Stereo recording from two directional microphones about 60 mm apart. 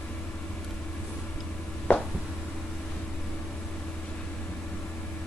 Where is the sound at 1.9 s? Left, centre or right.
Left.